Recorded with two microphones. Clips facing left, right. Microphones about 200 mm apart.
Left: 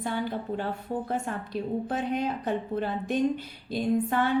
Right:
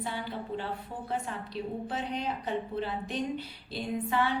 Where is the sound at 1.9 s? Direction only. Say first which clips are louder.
Left 5 dB; 50° left (ahead or behind).